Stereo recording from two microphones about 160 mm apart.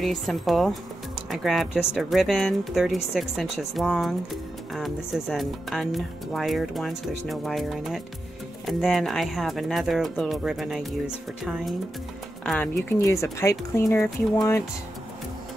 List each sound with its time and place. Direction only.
0.0 s speech: centre (ahead or behind)
13.0 s speech: 20° left (ahead or behind)